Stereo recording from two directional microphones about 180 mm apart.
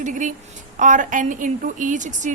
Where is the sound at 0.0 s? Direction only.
45° right (ahead or behind).